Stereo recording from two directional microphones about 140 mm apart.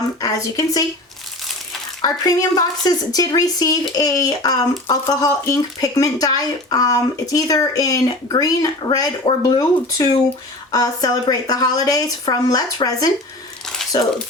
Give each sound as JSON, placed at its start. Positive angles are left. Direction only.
{"t": 0.2, "sound": "a woman's voice", "side_deg": 25}
{"t": 2.0, "sound": "speech", "side_deg": 25}